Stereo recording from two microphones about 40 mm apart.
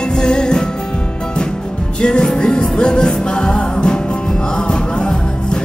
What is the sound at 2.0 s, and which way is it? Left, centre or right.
Music, left.